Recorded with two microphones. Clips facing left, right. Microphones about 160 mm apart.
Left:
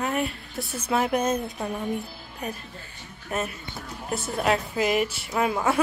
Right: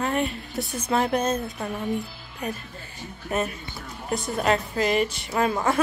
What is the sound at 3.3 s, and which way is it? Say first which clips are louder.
A woman's voice: right 3 dB; centre (ahead or behind).